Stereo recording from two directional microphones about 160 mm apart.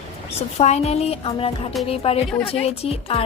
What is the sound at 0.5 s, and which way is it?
Speech, 40° left (ahead or behind).